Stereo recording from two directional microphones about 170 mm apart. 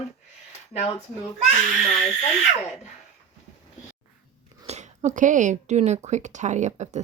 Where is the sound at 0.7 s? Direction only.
40° left (ahead or behind).